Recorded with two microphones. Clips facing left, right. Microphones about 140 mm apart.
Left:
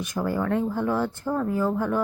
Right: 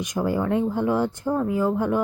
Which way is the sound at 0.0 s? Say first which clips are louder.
Right 2 dB; 15° right (ahead or behind).